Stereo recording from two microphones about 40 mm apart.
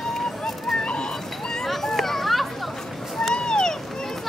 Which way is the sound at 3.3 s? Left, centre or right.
Centre.